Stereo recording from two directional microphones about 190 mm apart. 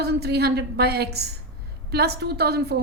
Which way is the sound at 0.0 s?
60° right (ahead or behind).